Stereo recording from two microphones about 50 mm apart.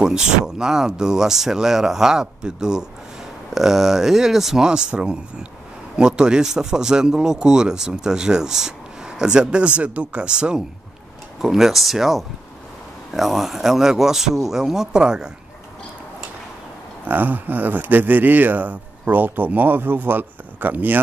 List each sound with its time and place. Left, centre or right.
0.0 s speech: centre
11.4 s speech: centre
17.1 s speech: right